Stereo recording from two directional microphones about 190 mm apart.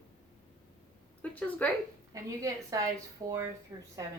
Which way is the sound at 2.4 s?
15° right (ahead or behind).